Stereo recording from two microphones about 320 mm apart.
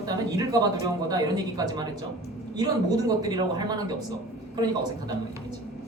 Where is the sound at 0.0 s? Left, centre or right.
Centre.